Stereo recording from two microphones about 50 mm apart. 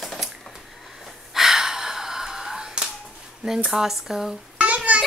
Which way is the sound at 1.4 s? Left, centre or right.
Centre.